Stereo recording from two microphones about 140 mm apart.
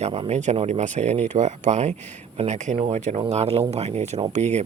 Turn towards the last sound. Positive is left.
turn(degrees=-55)  # may be behind; listen again after turning